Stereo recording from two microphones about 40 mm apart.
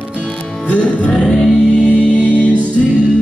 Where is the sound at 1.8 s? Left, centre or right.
Right.